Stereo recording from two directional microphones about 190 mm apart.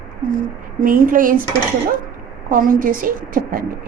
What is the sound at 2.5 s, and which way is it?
A woman's voice, 45° right (ahead or behind).